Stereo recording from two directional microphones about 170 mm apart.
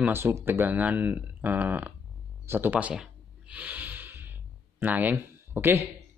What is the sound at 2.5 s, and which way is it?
Snort, 10° right (ahead or behind).